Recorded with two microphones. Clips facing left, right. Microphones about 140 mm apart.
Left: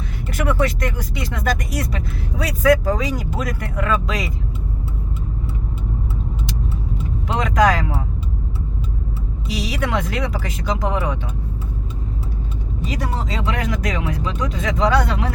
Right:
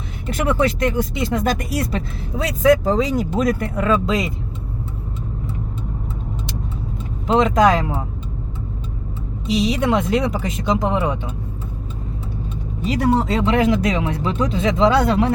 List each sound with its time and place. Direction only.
0.3 s speech: 25° right (ahead or behind)
7.3 s speech: 25° right (ahead or behind)
9.5 s speech: 25° right (ahead or behind)
13.3 s speech: 30° right (ahead or behind)